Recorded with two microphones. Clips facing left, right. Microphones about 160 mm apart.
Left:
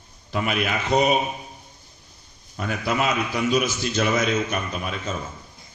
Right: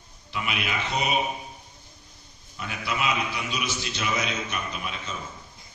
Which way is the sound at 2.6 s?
45° left (ahead or behind).